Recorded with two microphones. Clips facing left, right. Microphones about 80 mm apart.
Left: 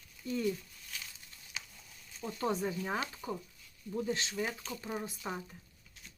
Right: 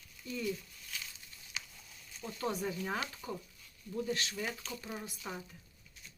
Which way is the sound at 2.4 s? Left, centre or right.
Left.